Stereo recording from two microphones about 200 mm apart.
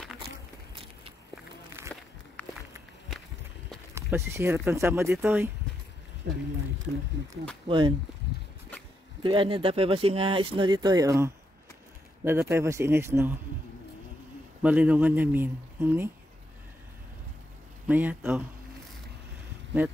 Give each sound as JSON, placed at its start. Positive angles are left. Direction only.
{"t": 1.8, "sound": "a sound", "side_deg": -10}
{"t": 2.4, "sound": "walk", "side_deg": 10}
{"t": 3.9, "sound": "a man's voice", "side_deg": -15}
{"t": 6.2, "sound": "speech", "side_deg": -60}
{"t": 7.6, "sound": "speech", "side_deg": -25}
{"t": 9.2, "sound": "a man's voice", "side_deg": -25}
{"t": 14.6, "sound": "a man's voice", "side_deg": -5}
{"t": 17.8, "sound": "a man's voice", "side_deg": -10}